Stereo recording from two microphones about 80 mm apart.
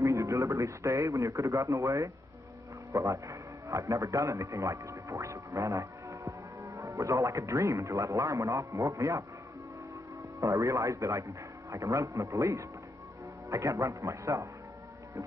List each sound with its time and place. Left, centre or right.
0.0 s a man's voice: right
10.4 s a man's voice: right